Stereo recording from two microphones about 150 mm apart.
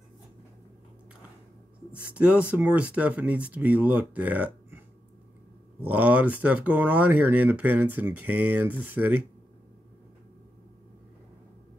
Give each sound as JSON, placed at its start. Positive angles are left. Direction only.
{"t": 2.1, "sound": "speech", "side_deg": -10}
{"t": 5.8, "sound": "speech", "side_deg": -10}